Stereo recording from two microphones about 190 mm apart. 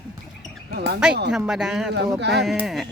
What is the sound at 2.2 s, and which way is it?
Speech, 65° right (ahead or behind).